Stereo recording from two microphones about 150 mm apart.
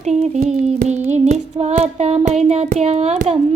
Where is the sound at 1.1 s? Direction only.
50° right (ahead or behind).